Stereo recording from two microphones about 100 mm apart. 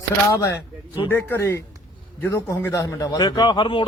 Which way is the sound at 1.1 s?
20° left (ahead or behind).